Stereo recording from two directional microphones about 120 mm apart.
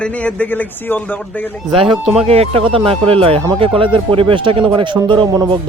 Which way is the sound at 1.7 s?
45° right (ahead or behind).